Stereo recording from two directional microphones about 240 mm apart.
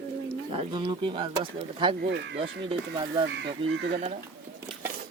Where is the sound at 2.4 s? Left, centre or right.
Right.